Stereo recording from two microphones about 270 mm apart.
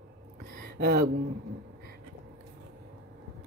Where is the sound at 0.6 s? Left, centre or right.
Right.